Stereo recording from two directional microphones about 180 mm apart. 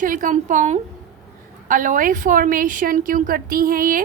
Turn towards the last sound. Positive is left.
turn(degrees=-50)  # may be behind; listen again after turning